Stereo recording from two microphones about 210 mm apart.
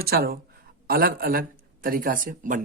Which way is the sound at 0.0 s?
45° right (ahead or behind).